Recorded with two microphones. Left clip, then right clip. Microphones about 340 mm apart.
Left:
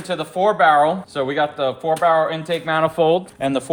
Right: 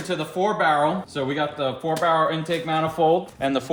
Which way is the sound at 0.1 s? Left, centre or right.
Centre.